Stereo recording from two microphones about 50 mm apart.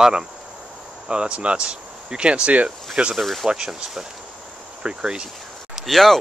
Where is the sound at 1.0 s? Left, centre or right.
Centre.